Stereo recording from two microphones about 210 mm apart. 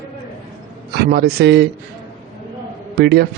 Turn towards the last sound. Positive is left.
turn(degrees=-50)  # may be behind; listen again after turning